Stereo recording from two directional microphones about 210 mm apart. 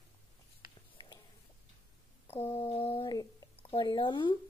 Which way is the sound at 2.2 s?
30° left (ahead or behind).